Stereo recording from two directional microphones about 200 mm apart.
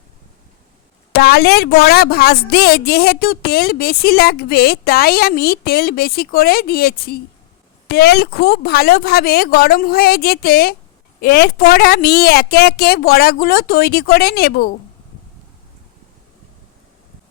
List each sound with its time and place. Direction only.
1.1 s a woman's voice: 50° left (ahead or behind)